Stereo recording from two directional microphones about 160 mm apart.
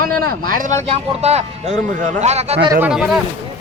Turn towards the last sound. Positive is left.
turn(degrees=-5)  # may be behind; listen again after turning